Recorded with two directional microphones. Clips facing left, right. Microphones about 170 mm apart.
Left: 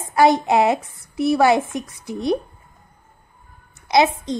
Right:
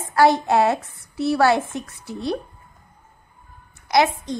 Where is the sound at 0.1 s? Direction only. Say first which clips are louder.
Left 1 dB; 20° left (ahead or behind).